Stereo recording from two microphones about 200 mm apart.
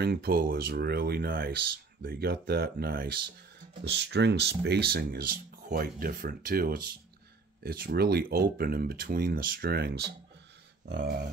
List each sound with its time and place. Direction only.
0.0 s speech: 50° right (ahead or behind)